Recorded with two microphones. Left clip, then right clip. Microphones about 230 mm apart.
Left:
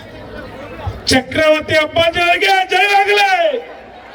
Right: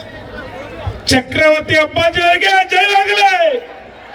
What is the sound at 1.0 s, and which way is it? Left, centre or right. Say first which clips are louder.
A man's voice: right 1 dB; left.